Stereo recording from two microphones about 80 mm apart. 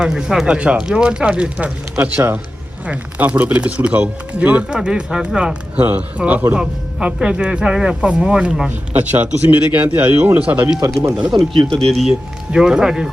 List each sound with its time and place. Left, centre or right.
0.0 s speech: centre
5.8 s speech: right
11.3 s speech: right
11.9 s speech: centre